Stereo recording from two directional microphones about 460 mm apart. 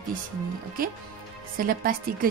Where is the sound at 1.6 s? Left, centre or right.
Centre.